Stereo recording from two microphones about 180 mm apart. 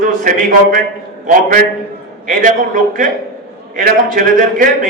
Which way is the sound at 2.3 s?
50° right (ahead or behind).